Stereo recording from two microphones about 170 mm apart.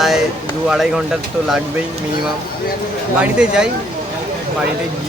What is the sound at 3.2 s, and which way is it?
Speech, 5° right (ahead or behind).